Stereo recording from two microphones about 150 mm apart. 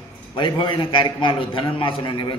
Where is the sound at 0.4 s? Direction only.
35° left (ahead or behind).